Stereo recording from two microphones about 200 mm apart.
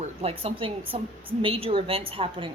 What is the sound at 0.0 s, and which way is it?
A woman's voice, 30° right (ahead or behind).